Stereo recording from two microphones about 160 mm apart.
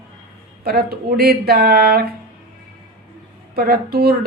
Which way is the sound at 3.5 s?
70° right (ahead or behind).